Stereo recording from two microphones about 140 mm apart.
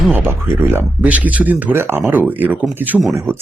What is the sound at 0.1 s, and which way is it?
Speech, 15° right (ahead or behind).